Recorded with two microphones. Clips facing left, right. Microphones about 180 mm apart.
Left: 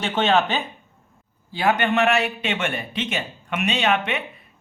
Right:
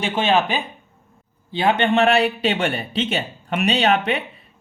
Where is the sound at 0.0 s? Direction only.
10° right (ahead or behind).